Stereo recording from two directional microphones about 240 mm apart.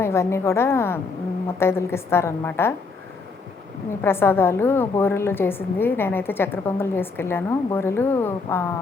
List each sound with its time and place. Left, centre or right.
0.0 s a woman's voice: centre
4.0 s a woman's voice: centre